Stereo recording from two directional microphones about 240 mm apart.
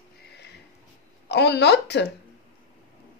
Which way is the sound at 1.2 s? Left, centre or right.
Left.